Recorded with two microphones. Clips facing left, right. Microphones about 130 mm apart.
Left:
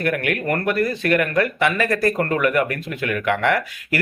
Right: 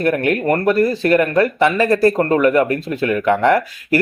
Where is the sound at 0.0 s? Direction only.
30° right (ahead or behind).